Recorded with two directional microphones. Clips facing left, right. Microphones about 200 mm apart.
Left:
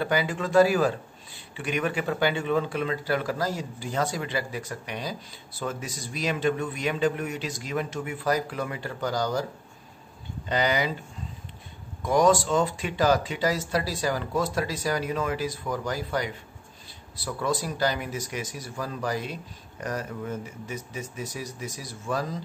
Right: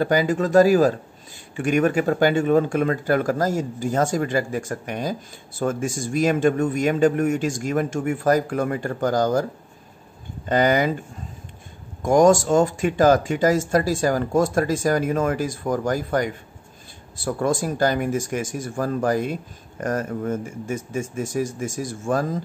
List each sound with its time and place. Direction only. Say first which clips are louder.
0.0 s speech: right 7 dB; 40° right (ahead or behind)
12.0 s speech: right 6 dB; 45° right (ahead or behind)